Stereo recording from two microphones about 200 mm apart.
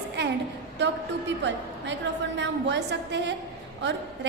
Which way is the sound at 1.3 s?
65° right (ahead or behind).